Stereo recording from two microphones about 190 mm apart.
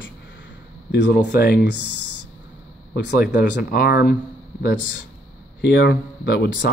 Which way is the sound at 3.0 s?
65° left (ahead or behind).